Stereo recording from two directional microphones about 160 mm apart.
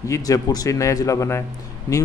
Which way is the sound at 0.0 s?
20° left (ahead or behind).